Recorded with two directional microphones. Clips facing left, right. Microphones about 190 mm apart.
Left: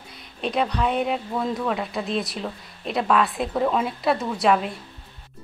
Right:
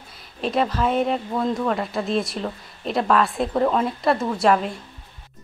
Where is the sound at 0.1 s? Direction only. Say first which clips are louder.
Right 2 dB; centre (ahead or behind).